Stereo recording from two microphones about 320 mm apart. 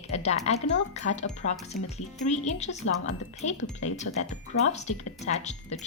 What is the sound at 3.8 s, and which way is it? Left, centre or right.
Speech, left.